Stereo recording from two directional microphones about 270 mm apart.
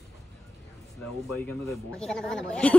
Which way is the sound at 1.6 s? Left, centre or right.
Centre.